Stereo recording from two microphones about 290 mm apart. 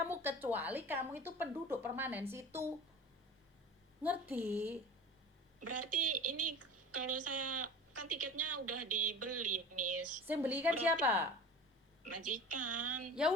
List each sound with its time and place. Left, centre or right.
0.0 s speech: centre
4.0 s speech: centre
5.6 s speech: right
10.2 s speech: centre
12.0 s speech: right